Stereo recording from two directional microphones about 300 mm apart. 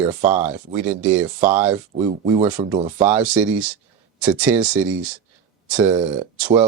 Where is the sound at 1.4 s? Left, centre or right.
Centre.